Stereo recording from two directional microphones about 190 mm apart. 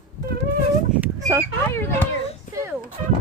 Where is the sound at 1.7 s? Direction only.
10° left (ahead or behind).